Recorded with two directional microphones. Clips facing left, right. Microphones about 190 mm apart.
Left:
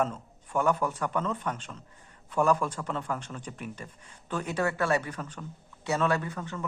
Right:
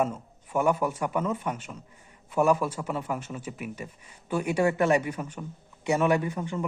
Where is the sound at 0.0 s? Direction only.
10° right (ahead or behind).